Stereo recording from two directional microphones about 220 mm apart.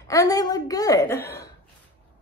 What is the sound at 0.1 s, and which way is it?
Speech, 15° left (ahead or behind).